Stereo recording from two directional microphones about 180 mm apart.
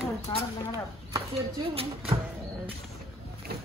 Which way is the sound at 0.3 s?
15° left (ahead or behind).